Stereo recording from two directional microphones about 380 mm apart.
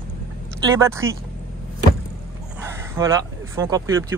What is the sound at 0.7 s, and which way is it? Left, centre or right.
Speech, centre.